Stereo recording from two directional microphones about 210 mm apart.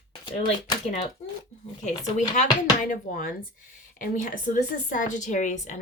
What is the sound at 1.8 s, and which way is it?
A woman's voice, 35° left (ahead or behind).